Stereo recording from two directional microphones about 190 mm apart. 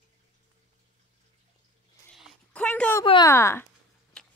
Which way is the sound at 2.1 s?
Centre (ahead or behind).